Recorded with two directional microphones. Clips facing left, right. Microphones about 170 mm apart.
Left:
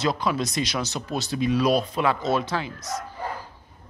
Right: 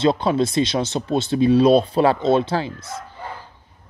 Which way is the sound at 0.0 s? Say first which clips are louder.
Right 7 dB; 30° right (ahead or behind).